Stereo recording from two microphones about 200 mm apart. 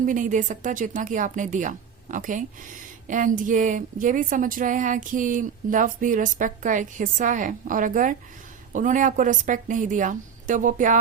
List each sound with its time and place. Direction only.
0.0 s speech: 40° right (ahead or behind)